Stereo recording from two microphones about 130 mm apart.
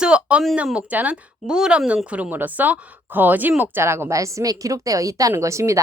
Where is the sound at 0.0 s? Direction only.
10° right (ahead or behind).